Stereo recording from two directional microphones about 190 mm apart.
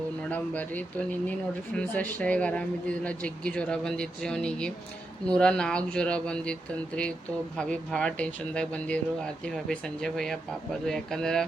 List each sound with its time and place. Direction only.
0.3 s speech: 10° left (ahead or behind)